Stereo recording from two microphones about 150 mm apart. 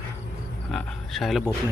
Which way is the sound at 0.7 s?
5° left (ahead or behind).